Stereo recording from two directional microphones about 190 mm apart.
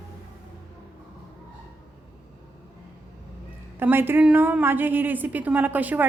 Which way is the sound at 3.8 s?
10° right (ahead or behind).